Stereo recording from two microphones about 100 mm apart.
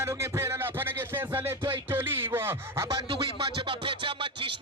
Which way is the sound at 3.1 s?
65° right (ahead or behind).